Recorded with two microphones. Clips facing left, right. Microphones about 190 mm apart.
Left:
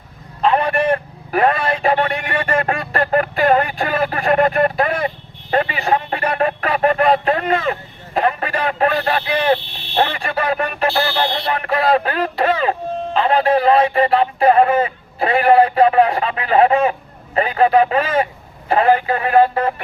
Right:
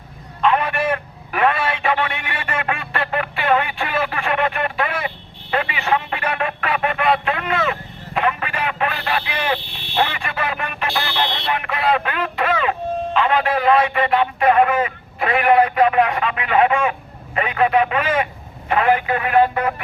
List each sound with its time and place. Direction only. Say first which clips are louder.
0.4 s vehicle: left 3 dB; 35° left (ahead or behind)
13.1 s a sound: left 5 dB; 35° left (ahead or behind)
18.7 s speech: left 3 dB; 35° left (ahead or behind)